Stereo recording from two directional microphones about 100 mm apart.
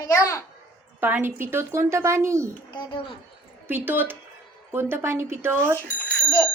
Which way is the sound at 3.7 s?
20° right (ahead or behind).